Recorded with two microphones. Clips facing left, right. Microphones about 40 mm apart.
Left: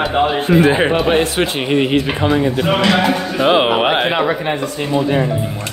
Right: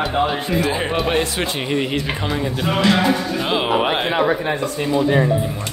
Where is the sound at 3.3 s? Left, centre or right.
Left.